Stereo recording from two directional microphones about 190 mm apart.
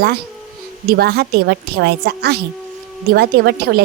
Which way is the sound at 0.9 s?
55° right (ahead or behind).